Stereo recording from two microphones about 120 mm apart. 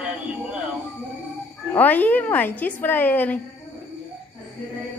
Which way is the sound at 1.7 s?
15° left (ahead or behind).